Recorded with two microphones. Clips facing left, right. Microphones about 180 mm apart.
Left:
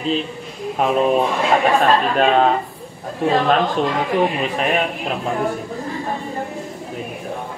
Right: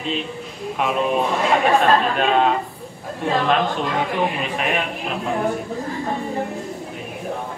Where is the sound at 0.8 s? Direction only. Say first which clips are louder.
Left 4 dB; 35° left (ahead or behind).